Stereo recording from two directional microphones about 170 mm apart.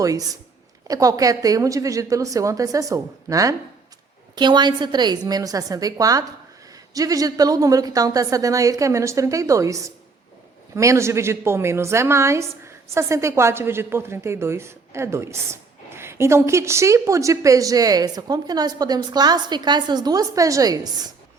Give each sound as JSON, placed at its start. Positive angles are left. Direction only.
{"t": 0.0, "sound": "a woman's voice", "side_deg": -20}